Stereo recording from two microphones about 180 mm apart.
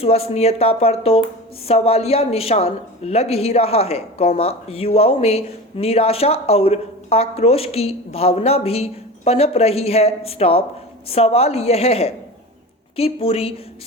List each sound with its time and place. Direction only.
0.0 s a woman's voice: 35° left (ahead or behind)